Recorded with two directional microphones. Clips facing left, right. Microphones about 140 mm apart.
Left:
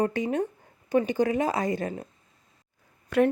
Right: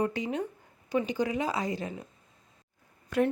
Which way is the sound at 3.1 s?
70° left (ahead or behind).